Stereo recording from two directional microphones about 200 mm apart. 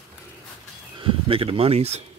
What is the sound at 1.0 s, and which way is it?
Speech, 30° right (ahead or behind).